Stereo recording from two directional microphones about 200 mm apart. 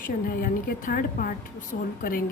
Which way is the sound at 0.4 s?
45° left (ahead or behind).